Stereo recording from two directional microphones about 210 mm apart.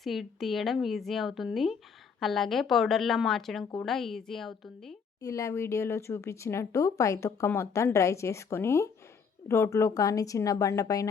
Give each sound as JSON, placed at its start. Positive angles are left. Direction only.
{"t": 0.0, "sound": "speech", "side_deg": 0}
{"t": 5.2, "sound": "speech", "side_deg": 15}